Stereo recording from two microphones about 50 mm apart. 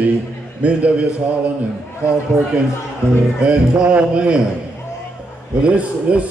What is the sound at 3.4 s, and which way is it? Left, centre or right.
A man's voice, centre.